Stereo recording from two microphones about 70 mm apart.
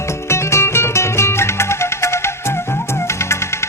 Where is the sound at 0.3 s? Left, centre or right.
Left.